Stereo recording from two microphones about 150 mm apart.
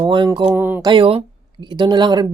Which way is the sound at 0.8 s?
35° right (ahead or behind).